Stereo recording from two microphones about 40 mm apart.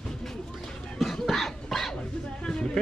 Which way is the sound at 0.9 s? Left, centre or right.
Centre.